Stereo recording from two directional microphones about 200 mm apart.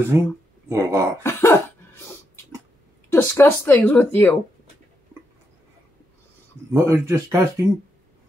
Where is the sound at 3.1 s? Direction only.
10° left (ahead or behind).